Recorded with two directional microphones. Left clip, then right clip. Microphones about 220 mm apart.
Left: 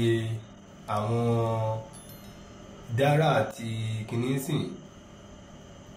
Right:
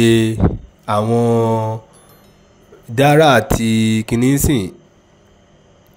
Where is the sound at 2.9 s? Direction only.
50° right (ahead or behind).